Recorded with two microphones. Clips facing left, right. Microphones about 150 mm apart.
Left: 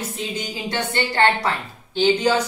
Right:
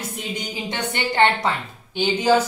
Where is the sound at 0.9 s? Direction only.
20° right (ahead or behind).